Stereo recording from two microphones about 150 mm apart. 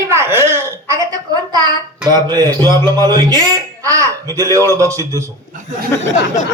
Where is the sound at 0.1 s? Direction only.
15° right (ahead or behind).